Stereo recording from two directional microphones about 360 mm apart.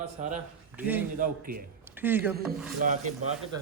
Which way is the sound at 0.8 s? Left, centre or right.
Centre.